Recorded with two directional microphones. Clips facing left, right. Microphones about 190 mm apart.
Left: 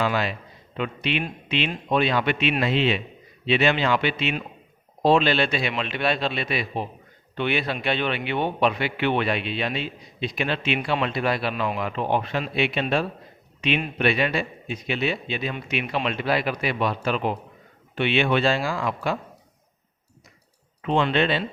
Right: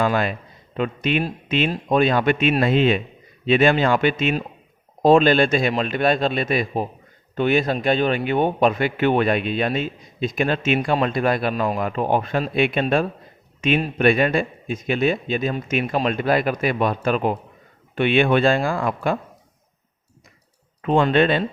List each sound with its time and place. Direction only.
0.0 s a man's voice: 50° right (ahead or behind)
20.8 s a man's voice: 50° right (ahead or behind)